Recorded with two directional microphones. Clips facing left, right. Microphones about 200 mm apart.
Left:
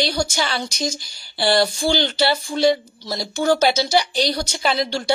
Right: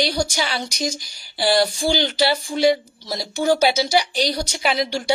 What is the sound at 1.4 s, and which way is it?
A woman's voice, 10° right (ahead or behind).